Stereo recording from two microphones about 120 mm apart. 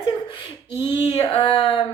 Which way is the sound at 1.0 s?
50° left (ahead or behind).